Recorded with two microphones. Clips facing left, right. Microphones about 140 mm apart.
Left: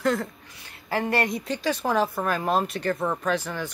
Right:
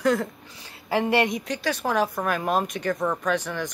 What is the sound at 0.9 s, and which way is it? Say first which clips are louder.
Speech: right 3 dB; 20° right (ahead or behind).